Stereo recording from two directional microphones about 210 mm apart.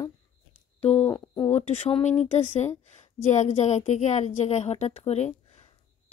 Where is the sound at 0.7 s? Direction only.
30° left (ahead or behind).